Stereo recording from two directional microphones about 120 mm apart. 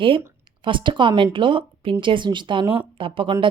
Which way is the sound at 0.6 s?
45° right (ahead or behind).